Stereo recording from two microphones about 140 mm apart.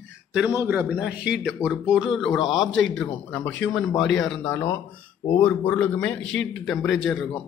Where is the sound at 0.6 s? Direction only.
10° right (ahead or behind).